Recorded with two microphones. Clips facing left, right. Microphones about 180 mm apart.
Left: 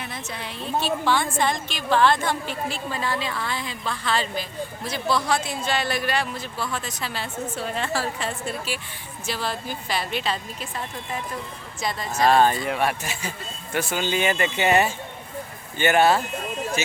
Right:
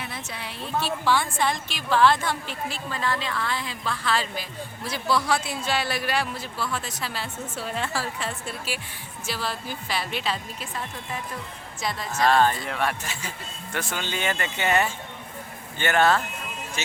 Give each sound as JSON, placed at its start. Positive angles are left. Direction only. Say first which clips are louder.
{"t": 0.0, "sound": "a sound", "louder": "left 2 dB", "side_deg": -5}
{"t": 1.1, "sound": "a woman's voice", "louder": "right 1 dB", "side_deg": -5}
{"t": 11.8, "sound": "a woman's voice", "louder": "left 2 dB", "side_deg": 0}
{"t": 12.1, "sound": "speech", "louder": "left 2 dB", "side_deg": 20}